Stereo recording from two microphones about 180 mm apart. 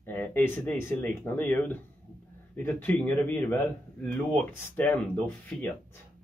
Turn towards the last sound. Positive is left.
turn(degrees=5)  # may be behind; listen again after turning